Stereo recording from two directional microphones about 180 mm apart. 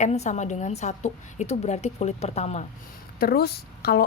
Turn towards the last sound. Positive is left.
turn(degrees=60)  # may be behind; listen again after turning